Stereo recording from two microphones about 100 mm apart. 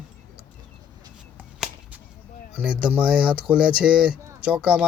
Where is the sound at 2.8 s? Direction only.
10° right (ahead or behind).